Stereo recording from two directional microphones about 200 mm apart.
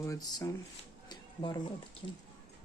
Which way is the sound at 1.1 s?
25° left (ahead or behind).